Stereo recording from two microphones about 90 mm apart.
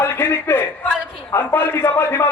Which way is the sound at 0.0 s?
25° left (ahead or behind).